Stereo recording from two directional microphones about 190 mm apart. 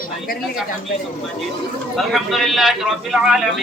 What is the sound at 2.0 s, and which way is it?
A man's voice, centre (ahead or behind).